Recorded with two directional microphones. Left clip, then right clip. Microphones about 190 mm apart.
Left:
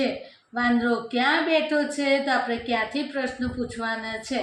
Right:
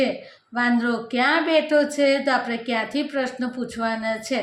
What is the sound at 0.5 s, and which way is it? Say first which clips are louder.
A woman's voice: right 1 dB; 50° right (ahead or behind).